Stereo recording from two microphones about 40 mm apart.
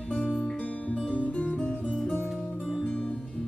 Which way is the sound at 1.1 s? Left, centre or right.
Left.